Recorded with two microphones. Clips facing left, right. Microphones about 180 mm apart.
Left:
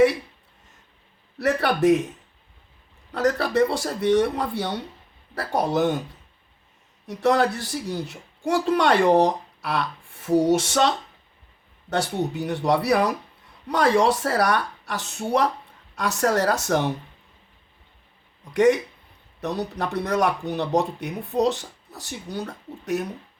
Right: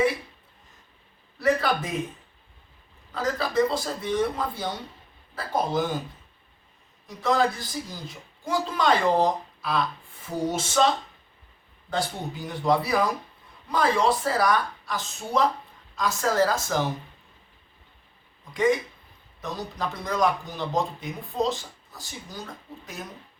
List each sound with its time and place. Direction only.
1.4 s a woman's voice: 70° left (ahead or behind)
3.1 s a woman's voice: 70° left (ahead or behind)
7.1 s a woman's voice: 70° left (ahead or behind)
18.5 s a woman's voice: 75° left (ahead or behind)